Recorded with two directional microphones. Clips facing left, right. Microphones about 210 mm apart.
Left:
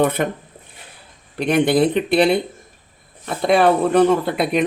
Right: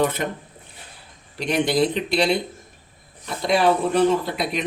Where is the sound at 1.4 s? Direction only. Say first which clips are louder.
Left 5 dB; 55° left (ahead or behind).